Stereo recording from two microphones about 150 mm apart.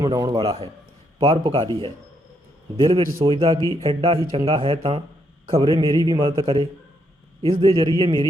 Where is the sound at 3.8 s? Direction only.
40° right (ahead or behind).